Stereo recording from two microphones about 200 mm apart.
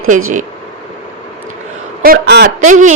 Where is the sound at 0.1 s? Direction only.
35° right (ahead or behind).